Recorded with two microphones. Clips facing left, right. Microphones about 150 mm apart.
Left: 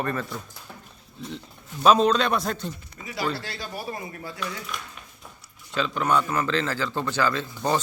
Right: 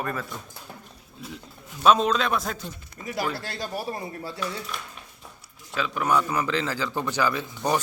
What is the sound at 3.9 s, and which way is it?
Speech, 30° right (ahead or behind).